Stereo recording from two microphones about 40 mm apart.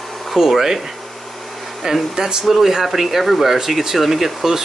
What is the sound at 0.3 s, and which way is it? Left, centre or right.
A man's voice, centre.